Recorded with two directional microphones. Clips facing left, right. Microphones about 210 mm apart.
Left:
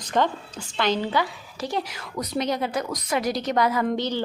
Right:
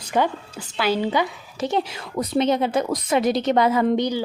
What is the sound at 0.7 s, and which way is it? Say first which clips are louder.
A woman's voice: right 2 dB; 10° right (ahead or behind).